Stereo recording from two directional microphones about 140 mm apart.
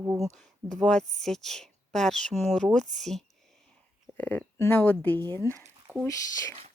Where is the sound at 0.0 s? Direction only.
20° right (ahead or behind).